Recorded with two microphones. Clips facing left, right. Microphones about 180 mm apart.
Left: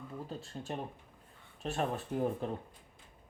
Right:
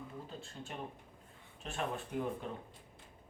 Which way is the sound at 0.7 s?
35° left (ahead or behind).